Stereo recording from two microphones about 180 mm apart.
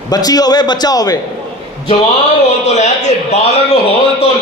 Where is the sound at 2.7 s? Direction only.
40° left (ahead or behind).